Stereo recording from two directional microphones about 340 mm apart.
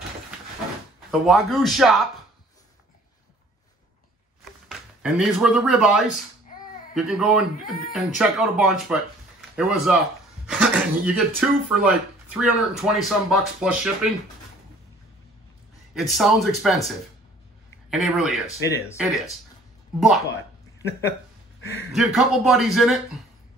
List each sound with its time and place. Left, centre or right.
1.1 s speech: centre
4.6 s speech: centre
15.9 s speech: centre
17.8 s speech: centre
21.7 s speech: centre